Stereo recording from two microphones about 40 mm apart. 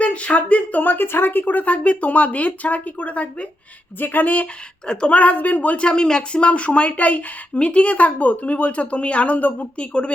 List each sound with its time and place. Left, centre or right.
0.0 s speech: left
4.9 s speech: left
5.1 s speech: left